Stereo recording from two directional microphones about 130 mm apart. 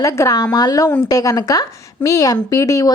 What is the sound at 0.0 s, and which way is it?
A woman's voice, 25° left (ahead or behind).